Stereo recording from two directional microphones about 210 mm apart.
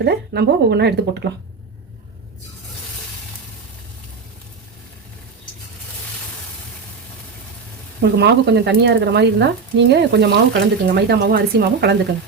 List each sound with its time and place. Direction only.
0.0 s speech: 50° right (ahead or behind)
8.0 s speech: 55° right (ahead or behind)